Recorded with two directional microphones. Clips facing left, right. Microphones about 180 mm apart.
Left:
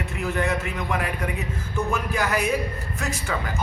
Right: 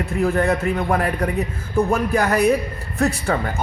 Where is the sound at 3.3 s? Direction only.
40° right (ahead or behind).